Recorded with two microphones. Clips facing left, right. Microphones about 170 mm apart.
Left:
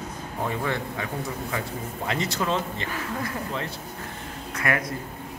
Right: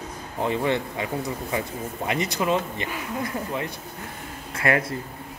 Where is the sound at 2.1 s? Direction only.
15° right (ahead or behind).